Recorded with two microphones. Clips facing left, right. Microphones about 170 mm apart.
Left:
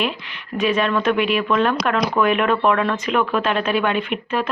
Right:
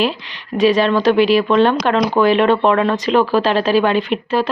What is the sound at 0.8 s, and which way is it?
Speech, 35° right (ahead or behind).